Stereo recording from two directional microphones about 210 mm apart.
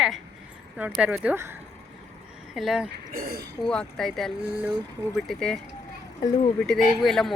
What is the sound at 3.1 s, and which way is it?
Speech, 45° right (ahead or behind).